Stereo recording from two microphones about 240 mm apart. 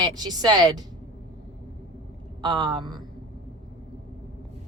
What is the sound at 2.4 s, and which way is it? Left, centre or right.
Speech, centre.